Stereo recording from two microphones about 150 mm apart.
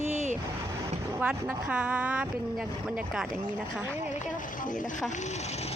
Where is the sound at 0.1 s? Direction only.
50° right (ahead or behind).